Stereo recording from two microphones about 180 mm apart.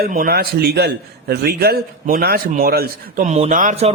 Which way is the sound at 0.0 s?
50° right (ahead or behind).